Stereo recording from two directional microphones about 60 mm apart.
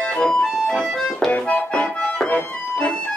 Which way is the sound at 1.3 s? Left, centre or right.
Left.